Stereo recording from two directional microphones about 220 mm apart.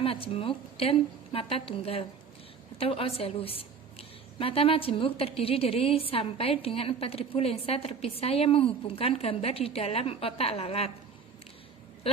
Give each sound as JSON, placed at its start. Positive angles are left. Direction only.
{"t": 0.0, "sound": "a woman's voice", "side_deg": 25}
{"t": 12.1, "sound": "speech", "side_deg": 25}